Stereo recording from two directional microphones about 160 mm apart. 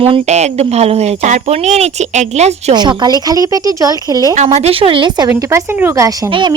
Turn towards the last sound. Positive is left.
turn(degrees=-30)  # may be behind; listen again after turning